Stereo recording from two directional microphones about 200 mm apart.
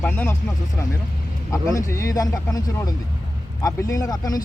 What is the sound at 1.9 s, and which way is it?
Speech, 15° left (ahead or behind).